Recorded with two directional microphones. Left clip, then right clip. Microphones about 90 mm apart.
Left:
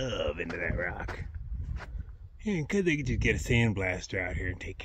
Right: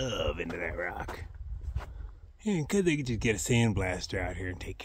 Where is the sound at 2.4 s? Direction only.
40° right (ahead or behind).